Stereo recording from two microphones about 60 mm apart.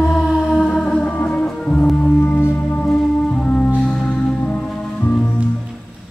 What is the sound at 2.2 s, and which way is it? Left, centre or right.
Music, left.